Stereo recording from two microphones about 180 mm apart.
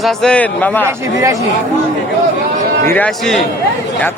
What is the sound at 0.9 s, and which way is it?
Speech, 15° right (ahead or behind).